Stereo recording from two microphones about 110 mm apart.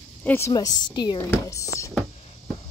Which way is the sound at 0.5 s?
35° left (ahead or behind).